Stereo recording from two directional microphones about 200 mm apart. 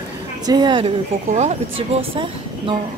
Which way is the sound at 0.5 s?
20° right (ahead or behind).